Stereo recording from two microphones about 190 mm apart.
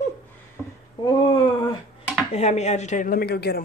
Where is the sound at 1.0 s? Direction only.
25° left (ahead or behind).